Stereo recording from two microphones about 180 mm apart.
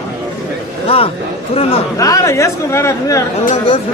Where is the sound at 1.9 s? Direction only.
20° left (ahead or behind).